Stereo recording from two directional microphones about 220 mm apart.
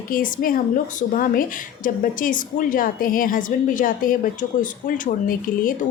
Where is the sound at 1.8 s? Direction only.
40° left (ahead or behind).